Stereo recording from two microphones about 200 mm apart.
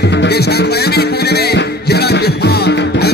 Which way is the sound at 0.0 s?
60° left (ahead or behind).